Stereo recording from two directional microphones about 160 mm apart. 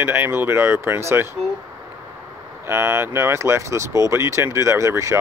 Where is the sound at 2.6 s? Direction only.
15° right (ahead or behind).